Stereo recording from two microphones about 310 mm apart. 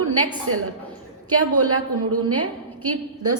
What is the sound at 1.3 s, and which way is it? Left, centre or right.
A woman's voice, right.